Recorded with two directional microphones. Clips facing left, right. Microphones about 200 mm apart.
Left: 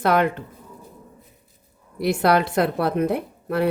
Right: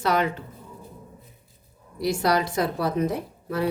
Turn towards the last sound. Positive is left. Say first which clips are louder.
# left 4 dB
turn(degrees=60)  # may be behind; listen again after turning